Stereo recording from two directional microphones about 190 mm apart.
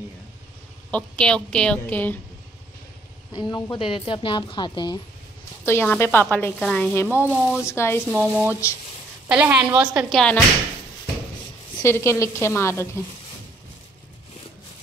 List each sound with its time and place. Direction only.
0.9 s a woman's voice: 5° left (ahead or behind)
3.3 s a woman's voice: 20° left (ahead or behind)
5.7 s speech: 10° left (ahead or behind)
7.1 s speech: 10° right (ahead or behind)
7.6 s speech: 15° left (ahead or behind)
8.1 s a woman's voice: 10° right (ahead or behind)
11.8 s speech: 15° left (ahead or behind)